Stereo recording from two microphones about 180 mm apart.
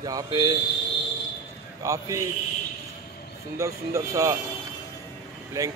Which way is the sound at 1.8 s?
15° right (ahead or behind).